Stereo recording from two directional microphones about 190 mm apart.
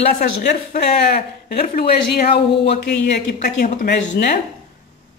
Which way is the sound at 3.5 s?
40° left (ahead or behind).